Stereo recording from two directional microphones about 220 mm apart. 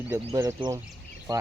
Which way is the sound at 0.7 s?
10° right (ahead or behind).